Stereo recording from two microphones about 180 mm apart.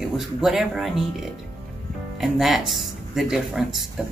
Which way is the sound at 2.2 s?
Centre (ahead or behind).